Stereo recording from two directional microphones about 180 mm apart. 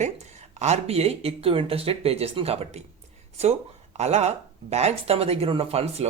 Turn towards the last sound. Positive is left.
turn(degrees=-35)  # may be behind; listen again after turning